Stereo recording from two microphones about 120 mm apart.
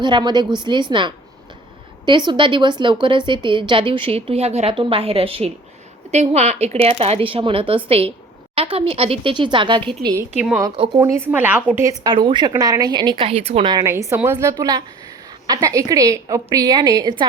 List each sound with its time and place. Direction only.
0.0 s a woman's voice: 40° right (ahead or behind); by 4.7 s 60° right (ahead or behind)
4.7 s a woman's voice: 45° right (ahead or behind)
6.1 s a woman's voice: 65° right (ahead or behind); by 9.9 s 40° right (ahead or behind)
10.3 s a woman's voice: 10° right (ahead or behind)
11.0 s a woman's voice: 20° right (ahead or behind)
11.9 s a woman's voice: 40° right (ahead or behind)
12.5 s a woman's voice: 30° right (ahead or behind)
13.5 s a woman's voice: 75° right (ahead or behind)
13.8 s a woman's voice: 20° right (ahead or behind)